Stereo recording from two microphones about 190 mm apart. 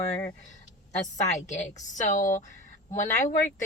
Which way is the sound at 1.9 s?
40° left (ahead or behind).